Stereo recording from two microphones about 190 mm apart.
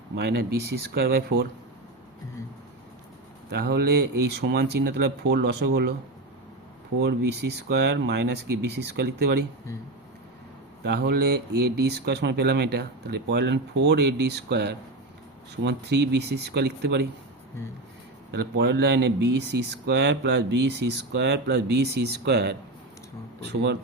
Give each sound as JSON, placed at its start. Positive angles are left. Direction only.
{"t": 0.2, "sound": "speech", "side_deg": -60}
{"t": 3.5, "sound": "speech", "side_deg": -55}
{"t": 7.0, "sound": "speech", "side_deg": -60}
{"t": 10.8, "sound": "speech", "side_deg": -60}
{"t": 18.3, "sound": "speech", "side_deg": -60}